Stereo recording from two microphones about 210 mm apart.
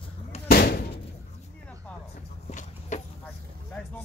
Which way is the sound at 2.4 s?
35° left (ahead or behind).